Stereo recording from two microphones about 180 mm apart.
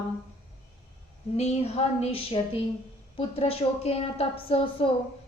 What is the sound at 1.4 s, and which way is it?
A woman's voice, 35° left (ahead or behind).